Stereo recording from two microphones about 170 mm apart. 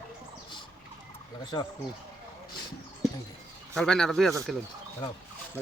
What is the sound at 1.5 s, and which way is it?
Speech, 25° left (ahead or behind).